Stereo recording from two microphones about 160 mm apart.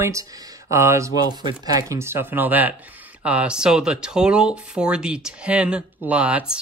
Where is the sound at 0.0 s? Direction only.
20° right (ahead or behind).